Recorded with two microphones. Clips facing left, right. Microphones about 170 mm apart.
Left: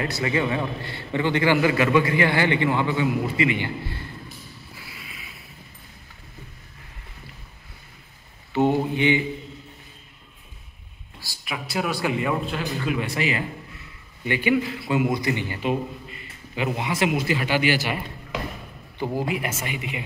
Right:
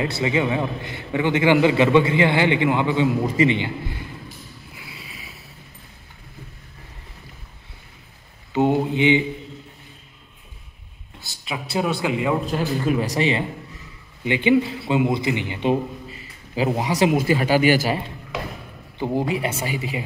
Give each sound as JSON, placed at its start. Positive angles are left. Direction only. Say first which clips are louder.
{"t": 0.0, "sound": "a man's voice", "louder": "right 3 dB", "side_deg": -20}
{"t": 8.5, "sound": "speech", "louder": "right 2 dB", "side_deg": -15}
{"t": 11.1, "sound": "a man's voice", "louder": "right 2 dB", "side_deg": -20}
{"t": 12.4, "sound": "a man's voice", "louder": "right 5 dB", "side_deg": -40}
{"t": 15.7, "sound": "a man's voice", "louder": "right 4 dB", "side_deg": -35}
{"t": 18.9, "sound": "speech", "louder": "right 4 dB", "side_deg": -20}
{"t": 19.2, "sound": "speech", "louder": "right 3 dB", "side_deg": -30}